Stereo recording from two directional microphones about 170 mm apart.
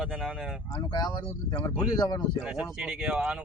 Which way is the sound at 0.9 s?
25° left (ahead or behind).